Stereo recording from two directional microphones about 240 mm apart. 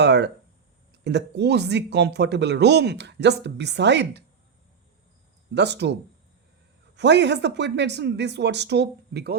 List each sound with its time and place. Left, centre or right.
0.0 s speech: right
5.5 s speech: right